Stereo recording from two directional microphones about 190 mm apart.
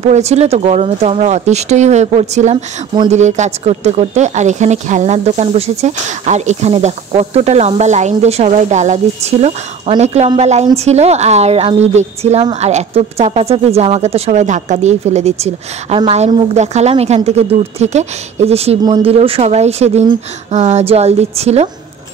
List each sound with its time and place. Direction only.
0.1 s a woman's voice: 35° right (ahead or behind)